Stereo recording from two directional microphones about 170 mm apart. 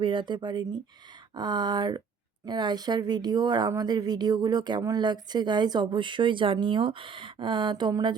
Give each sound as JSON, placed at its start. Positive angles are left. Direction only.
{"t": 0.0, "sound": "speech", "side_deg": -30}